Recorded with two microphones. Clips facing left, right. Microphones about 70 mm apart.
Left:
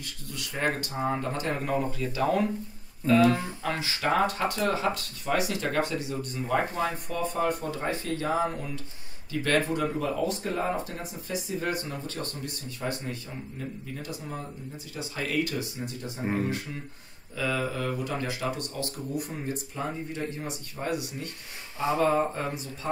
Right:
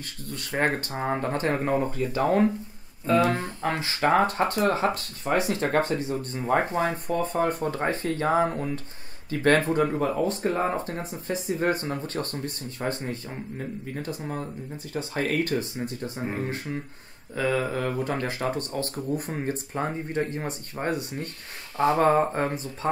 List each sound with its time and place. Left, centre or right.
0.0 s speech: right
17.4 s speech: right